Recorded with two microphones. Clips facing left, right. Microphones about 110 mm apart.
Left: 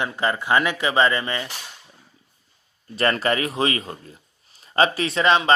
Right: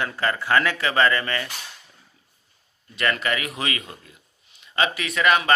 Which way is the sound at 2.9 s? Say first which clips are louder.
Left 4 dB; 35° left (ahead or behind).